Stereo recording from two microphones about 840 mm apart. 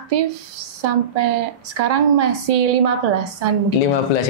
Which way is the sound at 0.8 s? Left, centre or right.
Right.